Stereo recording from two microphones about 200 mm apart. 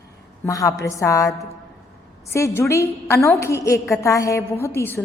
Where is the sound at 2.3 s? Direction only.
15° left (ahead or behind).